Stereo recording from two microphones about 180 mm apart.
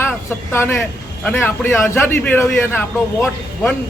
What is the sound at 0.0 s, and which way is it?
Speech, 15° left (ahead or behind).